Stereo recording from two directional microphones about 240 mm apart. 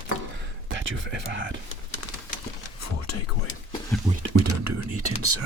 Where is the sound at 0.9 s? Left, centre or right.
Right.